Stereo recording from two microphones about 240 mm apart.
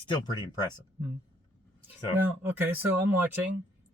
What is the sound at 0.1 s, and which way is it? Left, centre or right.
Speech, centre.